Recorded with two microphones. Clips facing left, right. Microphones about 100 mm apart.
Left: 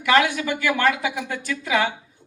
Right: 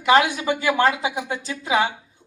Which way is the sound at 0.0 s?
20° right (ahead or behind).